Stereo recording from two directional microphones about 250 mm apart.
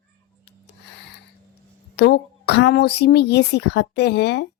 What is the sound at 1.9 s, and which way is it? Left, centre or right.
A woman's voice, left.